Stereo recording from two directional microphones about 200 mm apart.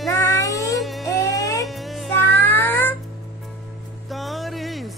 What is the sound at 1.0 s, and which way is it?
Baby cry, 15° left (ahead or behind).